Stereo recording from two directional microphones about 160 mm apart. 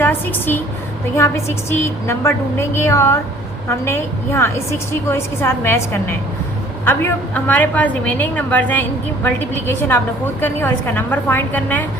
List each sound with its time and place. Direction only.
0.0 s a woman's voice: 15° left (ahead or behind)
1.8 s a woman's voice: 15° left (ahead or behind)